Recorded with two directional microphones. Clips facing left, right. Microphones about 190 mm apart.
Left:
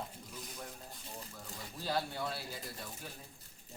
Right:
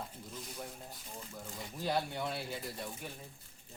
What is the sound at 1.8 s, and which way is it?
Speech, 20° right (ahead or behind).